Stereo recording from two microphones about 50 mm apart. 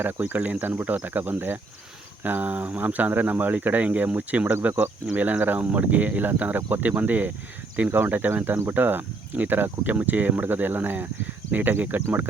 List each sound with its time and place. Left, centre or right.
0.6 s speech: right